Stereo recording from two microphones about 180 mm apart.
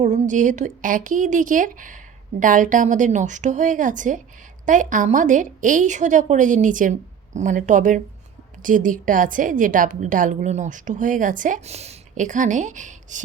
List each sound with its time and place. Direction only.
0.0 s a woman's voice: 45° right (ahead or behind)